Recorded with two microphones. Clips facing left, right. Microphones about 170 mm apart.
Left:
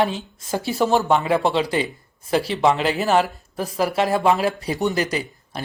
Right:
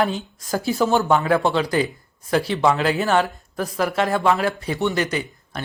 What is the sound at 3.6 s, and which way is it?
Speech, 30° left (ahead or behind).